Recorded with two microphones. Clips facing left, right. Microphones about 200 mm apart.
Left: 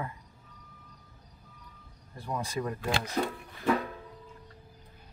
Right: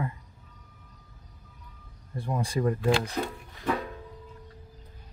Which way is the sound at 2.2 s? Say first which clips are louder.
Right 5 dB; 30° right (ahead or behind).